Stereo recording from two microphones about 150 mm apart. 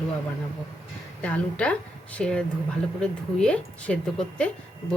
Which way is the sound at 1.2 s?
10° left (ahead or behind).